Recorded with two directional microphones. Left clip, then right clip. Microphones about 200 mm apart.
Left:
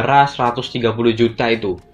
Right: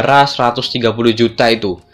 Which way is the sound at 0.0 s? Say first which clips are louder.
Right 3 dB; 40° right (ahead or behind).